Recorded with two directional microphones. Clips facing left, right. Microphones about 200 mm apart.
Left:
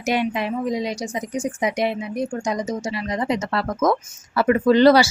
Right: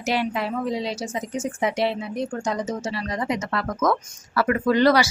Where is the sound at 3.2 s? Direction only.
30° left (ahead or behind).